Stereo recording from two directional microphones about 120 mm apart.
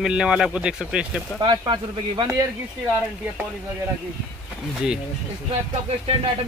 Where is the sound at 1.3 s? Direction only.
40° right (ahead or behind).